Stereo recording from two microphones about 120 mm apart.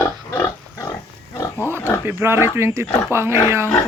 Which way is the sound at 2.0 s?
20° right (ahead or behind).